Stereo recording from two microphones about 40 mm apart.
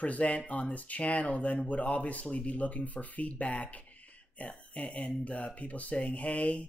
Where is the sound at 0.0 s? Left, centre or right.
Left.